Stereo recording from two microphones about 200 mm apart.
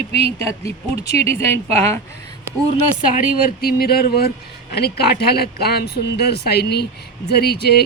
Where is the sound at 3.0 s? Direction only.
40° left (ahead or behind).